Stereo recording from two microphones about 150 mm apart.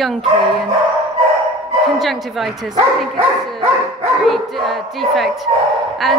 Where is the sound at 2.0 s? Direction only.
Centre (ahead or behind).